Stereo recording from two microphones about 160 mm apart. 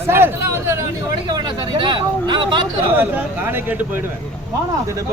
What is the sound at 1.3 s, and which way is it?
Speech, 30° right (ahead or behind).